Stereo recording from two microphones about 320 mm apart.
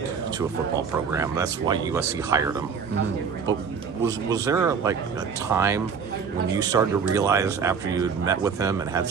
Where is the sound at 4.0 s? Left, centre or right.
Centre.